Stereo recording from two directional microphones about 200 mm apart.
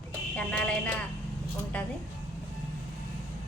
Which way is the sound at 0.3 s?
5° left (ahead or behind).